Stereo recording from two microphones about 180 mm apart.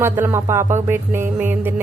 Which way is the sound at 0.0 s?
15° right (ahead or behind).